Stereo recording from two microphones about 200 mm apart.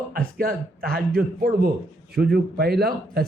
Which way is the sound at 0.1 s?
45° right (ahead or behind).